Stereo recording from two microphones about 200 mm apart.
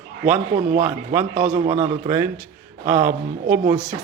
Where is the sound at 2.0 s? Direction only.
10° right (ahead or behind).